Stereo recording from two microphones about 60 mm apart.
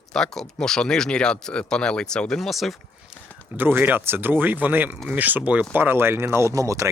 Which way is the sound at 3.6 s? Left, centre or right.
Right.